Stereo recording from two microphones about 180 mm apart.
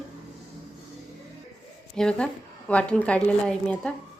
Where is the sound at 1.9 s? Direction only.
5° left (ahead or behind).